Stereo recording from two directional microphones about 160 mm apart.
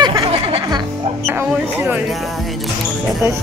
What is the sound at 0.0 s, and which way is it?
Music, 35° right (ahead or behind).